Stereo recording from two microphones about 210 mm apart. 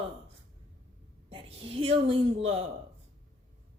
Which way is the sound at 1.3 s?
30° right (ahead or behind).